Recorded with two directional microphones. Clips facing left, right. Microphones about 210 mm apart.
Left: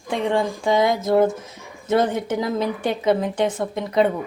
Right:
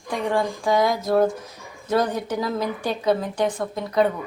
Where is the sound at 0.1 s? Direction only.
25° left (ahead or behind).